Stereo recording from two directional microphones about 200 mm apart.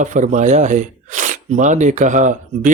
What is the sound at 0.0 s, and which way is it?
Speech, 40° right (ahead or behind).